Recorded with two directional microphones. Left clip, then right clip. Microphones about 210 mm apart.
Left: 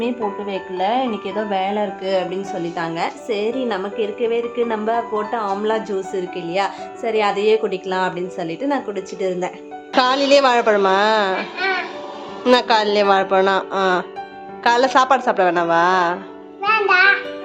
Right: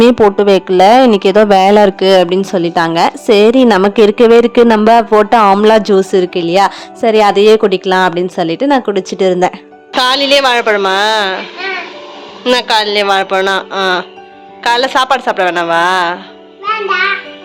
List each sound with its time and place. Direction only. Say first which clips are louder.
0.0 s a woman's voice: right 16 dB; 60° right (ahead or behind); by 9.5 s 45° right (ahead or behind)
9.9 s a woman's voice: right 5 dB; centre (ahead or behind)
12.5 s a woman's voice: right 4 dB; 5° left (ahead or behind)